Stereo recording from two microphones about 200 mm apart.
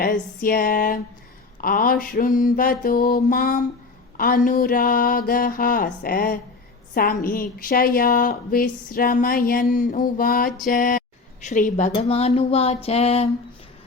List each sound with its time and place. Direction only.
0.0 s a woman's voice: 45° left (ahead or behind)